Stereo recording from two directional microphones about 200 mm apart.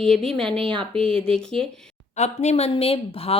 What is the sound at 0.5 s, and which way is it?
Speech, 25° right (ahead or behind).